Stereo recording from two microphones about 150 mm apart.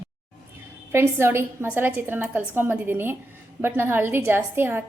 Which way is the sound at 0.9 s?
15° right (ahead or behind).